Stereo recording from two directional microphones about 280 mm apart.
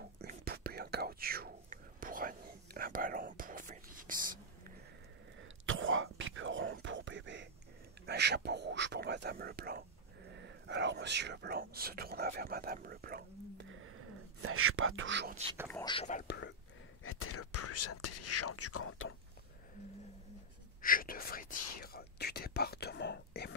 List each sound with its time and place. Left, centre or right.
0.2 s whispering: right
5.7 s whispering: right
10.7 s speech: right
15.7 s speech: centre; by 16.5 s left
17.0 s speech: left
20.8 s speech: left